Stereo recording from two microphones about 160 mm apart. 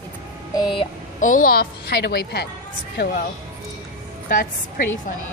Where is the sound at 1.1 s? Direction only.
55° left (ahead or behind); by 2.4 s 90° left.